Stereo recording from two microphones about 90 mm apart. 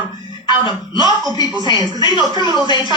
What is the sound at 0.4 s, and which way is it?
Speech, 55° left (ahead or behind).